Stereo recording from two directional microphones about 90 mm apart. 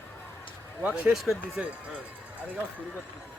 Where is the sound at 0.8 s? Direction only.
10° right (ahead or behind).